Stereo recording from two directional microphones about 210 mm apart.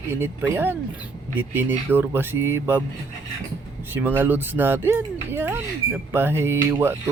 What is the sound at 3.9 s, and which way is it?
Speech, 10° right (ahead or behind).